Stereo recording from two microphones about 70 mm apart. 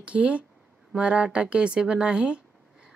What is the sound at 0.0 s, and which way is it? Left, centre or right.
A woman's voice, centre.